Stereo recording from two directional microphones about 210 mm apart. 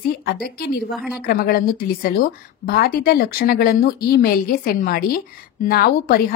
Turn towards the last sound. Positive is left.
turn(degrees=45)  # may be behind; listen again after turning